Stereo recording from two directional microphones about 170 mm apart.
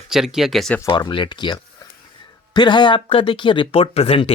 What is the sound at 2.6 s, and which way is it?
Speech, 25° left (ahead or behind).